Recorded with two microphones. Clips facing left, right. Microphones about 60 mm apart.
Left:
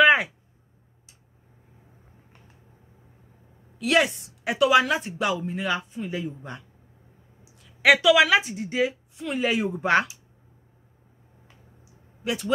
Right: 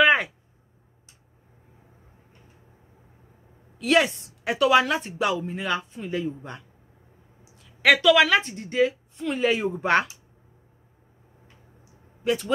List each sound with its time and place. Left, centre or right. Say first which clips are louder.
0.0 s a sound: left 1 dB; centre
3.7 s a woman's voice: right 1 dB; centre
12.2 s speech: right 2 dB; centre